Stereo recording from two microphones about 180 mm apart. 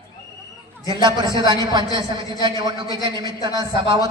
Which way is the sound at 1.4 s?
25° right (ahead or behind).